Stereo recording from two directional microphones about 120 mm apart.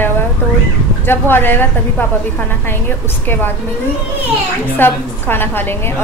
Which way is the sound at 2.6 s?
15° left (ahead or behind).